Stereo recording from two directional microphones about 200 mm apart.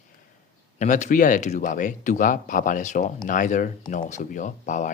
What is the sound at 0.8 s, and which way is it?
Speech, 40° left (ahead or behind).